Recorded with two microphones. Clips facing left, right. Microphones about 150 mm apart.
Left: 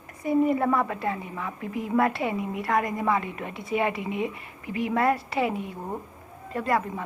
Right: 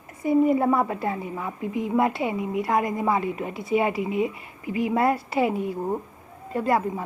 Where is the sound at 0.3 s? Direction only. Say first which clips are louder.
Right 3 dB; 25° right (ahead or behind).